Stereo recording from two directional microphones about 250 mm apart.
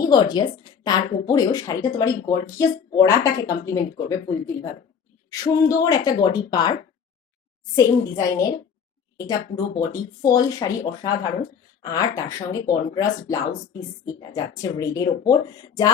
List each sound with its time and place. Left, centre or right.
0.0 s a woman's voice: centre
7.8 s speech: centre